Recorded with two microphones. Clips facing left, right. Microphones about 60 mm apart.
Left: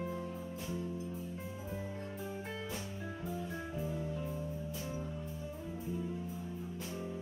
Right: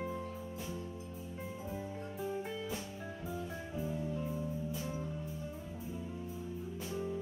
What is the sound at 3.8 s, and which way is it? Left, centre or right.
Music, centre.